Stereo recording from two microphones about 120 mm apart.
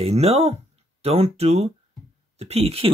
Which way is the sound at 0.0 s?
60° right (ahead or behind).